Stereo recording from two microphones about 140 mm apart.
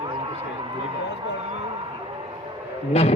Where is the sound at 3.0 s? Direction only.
45° left (ahead or behind).